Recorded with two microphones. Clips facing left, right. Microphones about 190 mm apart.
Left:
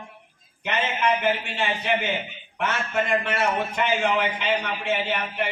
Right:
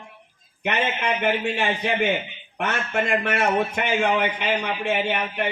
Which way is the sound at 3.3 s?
55° right (ahead or behind).